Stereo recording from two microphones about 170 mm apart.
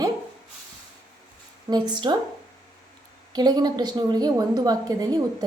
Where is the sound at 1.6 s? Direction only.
25° right (ahead or behind).